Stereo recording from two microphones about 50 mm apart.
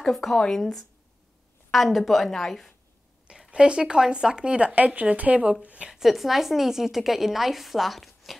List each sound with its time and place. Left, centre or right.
0.0 s a woman's voice: centre
3.3 s speech: centre
5.9 s a woman's voice: centre